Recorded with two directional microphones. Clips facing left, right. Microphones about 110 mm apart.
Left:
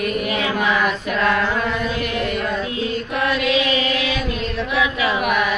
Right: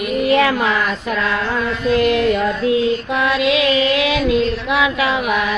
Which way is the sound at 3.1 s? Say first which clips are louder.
Even; 90° right.